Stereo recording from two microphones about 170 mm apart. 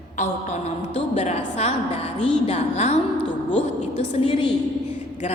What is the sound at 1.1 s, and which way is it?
A woman's voice, 40° left (ahead or behind).